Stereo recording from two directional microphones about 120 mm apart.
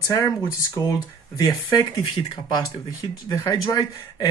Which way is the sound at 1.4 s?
30° left (ahead or behind).